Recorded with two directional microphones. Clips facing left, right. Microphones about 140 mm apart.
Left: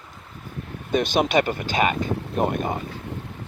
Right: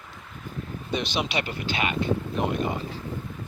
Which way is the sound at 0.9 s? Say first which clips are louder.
Left 8 dB; 50° left (ahead or behind).